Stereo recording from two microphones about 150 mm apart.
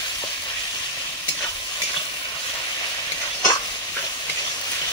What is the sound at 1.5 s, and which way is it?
Stir, 25° left (ahead or behind).